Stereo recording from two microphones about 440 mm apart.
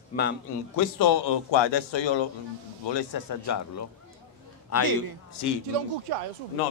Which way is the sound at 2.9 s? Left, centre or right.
Left.